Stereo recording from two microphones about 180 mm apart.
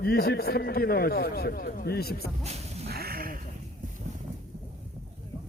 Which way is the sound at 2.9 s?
60° right (ahead or behind).